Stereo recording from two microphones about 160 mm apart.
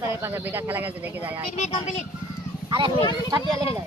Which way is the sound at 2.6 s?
30° right (ahead or behind).